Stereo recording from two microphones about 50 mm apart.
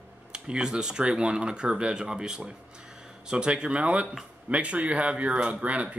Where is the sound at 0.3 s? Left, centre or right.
Centre.